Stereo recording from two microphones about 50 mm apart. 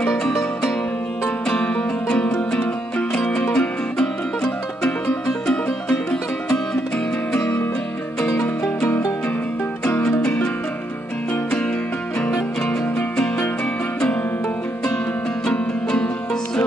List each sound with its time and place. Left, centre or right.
1.5 s music: centre
10.2 s music: left
15.4 s music: centre